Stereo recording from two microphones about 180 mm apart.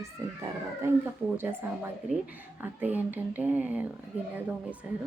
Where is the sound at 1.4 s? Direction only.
15° right (ahead or behind).